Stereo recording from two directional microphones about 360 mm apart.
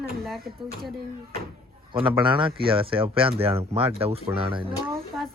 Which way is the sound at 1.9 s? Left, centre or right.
Centre.